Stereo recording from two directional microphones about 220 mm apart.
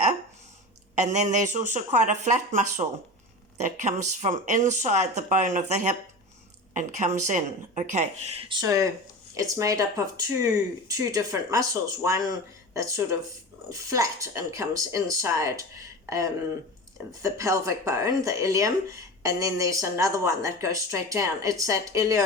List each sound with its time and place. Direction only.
0.9 s speech: 30° right (ahead or behind); by 22.2 s 15° right (ahead or behind)